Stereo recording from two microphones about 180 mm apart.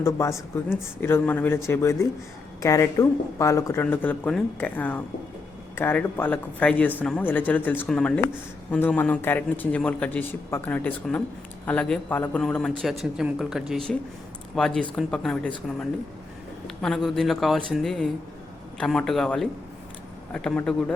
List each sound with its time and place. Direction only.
0.0 s speech: 15° left (ahead or behind)